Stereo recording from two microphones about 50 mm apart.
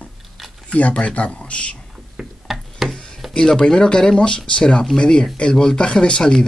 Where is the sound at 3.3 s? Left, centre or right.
Centre.